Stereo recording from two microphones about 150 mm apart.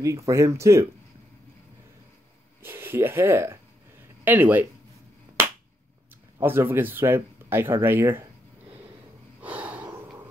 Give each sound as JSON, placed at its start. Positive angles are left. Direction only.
{"t": 0.0, "sound": "speech", "side_deg": -20}
{"t": 2.6, "sound": "speech", "side_deg": -15}
{"t": 6.4, "sound": "speech", "side_deg": -15}
{"t": 9.4, "sound": "snort", "side_deg": -10}